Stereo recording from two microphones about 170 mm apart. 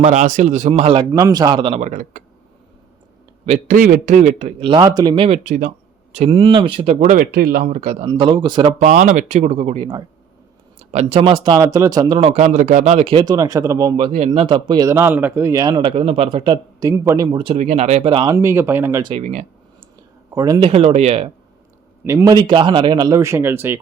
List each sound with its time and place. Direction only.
0.0 s speech: 45° right (ahead or behind)
1.9 s speech: 50° right (ahead or behind)
3.4 s speech: 45° right (ahead or behind)
5.4 s speech: 50° right (ahead or behind)
8.0 s speech: 30° right (ahead or behind)
8.8 s speech: 45° right (ahead or behind); by 16.9 s 30° right (ahead or behind)
16.9 s speech: 15° right (ahead or behind)
17.3 s speech: 35° right (ahead or behind)
18.3 s speech: 15° right (ahead or behind)
19.2 s speech: 45° right (ahead or behind)
20.3 s speech: 20° right (ahead or behind)
20.6 s speech: 35° right (ahead or behind)
22.0 s speech: 15° right (ahead or behind)
22.4 s speech: 30° right (ahead or behind)